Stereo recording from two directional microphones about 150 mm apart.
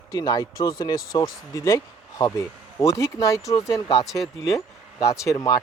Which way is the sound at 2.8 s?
20° left (ahead or behind).